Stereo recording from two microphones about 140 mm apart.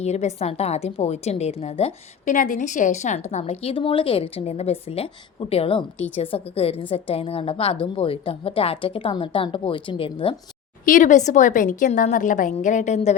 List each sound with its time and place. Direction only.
0.0 s a woman's voice: 50° left (ahead or behind)
2.3 s a woman's voice: 65° left (ahead or behind); by 10.3 s 40° left (ahead or behind)
10.8 s a woman's voice: 65° left (ahead or behind)